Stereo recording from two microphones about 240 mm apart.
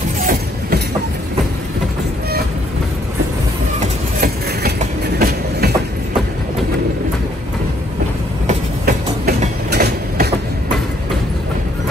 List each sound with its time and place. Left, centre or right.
0.2 s train: right
3.8 s train: right
8.5 s train: right